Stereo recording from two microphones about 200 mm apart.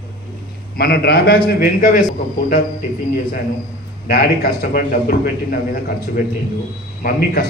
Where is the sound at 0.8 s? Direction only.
50° left (ahead or behind).